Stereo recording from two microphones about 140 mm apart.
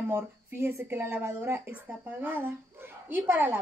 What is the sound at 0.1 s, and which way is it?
A woman's voice, 15° right (ahead or behind).